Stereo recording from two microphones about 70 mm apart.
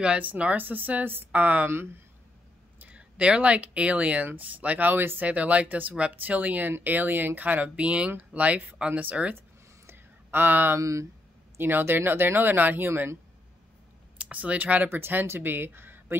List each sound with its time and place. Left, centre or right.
0.0 s speech: centre
2.8 s speech: centre
9.8 s a sound: right
10.8 s speech: right
11.5 s speech: right
14.1 s speech: right